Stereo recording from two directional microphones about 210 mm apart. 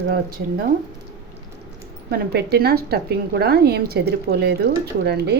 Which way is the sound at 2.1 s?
50° right (ahead or behind).